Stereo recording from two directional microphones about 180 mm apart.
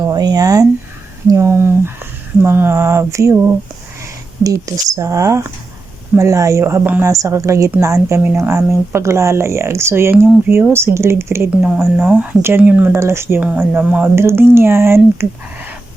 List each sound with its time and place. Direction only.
0.0 s a woman's voice: 20° right (ahead or behind)